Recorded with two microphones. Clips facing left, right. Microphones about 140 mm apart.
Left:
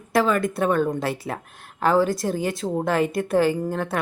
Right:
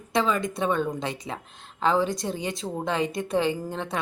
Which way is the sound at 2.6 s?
15° left (ahead or behind).